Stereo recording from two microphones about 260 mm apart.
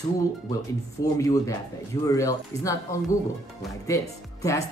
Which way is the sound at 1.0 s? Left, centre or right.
Centre.